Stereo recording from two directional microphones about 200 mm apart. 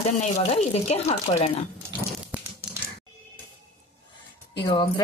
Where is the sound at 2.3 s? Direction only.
5° right (ahead or behind).